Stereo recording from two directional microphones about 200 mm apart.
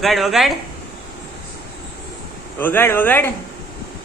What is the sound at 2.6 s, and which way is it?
Speech, 10° left (ahead or behind).